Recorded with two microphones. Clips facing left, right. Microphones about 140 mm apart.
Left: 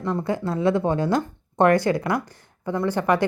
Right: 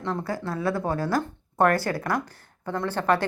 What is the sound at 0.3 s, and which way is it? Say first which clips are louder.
A woman's voice: left 8 dB; 20° left (ahead or behind).